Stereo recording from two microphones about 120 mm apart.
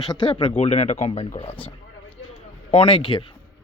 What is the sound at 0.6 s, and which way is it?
Speech, 65° left (ahead or behind).